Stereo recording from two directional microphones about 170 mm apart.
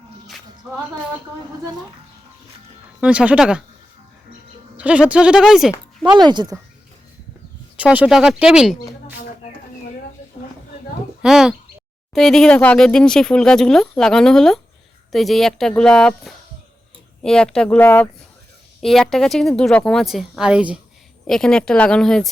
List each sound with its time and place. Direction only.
0.3 s music: centre (ahead or behind)
3.0 s speech: 5° right (ahead or behind)
4.8 s speech: 5° right (ahead or behind)
6.1 s speech: 25° right (ahead or behind)
7.8 s speech: 5° right (ahead or behind)
11.2 s speech: 5° right (ahead or behind)